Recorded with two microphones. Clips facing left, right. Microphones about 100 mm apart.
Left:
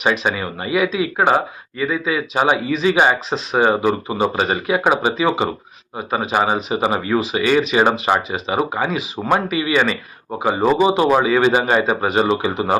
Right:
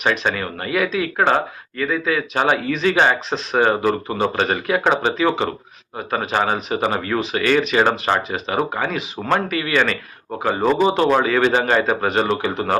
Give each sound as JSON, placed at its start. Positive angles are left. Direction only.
{"t": 0.0, "sound": "speech", "side_deg": 5}
{"t": 6.1, "sound": "speech", "side_deg": 5}